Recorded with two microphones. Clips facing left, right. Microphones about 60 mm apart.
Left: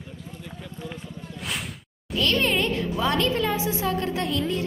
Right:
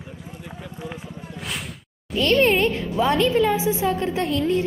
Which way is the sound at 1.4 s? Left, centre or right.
Centre.